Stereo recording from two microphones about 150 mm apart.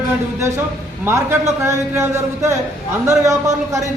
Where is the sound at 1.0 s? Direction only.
15° right (ahead or behind).